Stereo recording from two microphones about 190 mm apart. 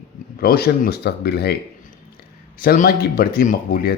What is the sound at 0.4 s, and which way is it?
Speech, 55° left (ahead or behind).